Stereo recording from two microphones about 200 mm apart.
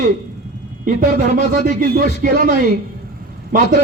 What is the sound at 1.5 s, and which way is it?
Speech, 45° right (ahead or behind).